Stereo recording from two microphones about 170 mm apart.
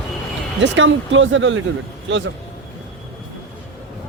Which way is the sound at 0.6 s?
90° right.